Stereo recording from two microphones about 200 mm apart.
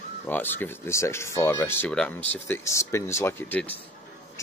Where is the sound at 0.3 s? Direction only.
10° left (ahead or behind).